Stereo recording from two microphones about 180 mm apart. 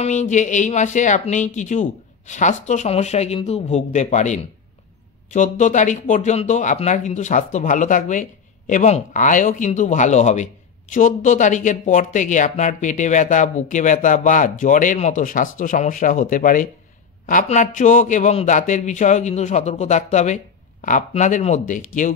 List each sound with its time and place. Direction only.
0.0 s a woman's voice: 40° left (ahead or behind)